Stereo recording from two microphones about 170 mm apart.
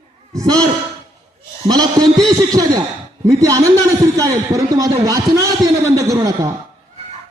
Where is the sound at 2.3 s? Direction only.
20° right (ahead or behind).